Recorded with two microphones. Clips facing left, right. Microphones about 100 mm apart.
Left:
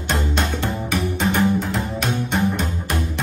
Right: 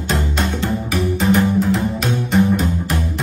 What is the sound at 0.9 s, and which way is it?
Music, 5° right (ahead or behind).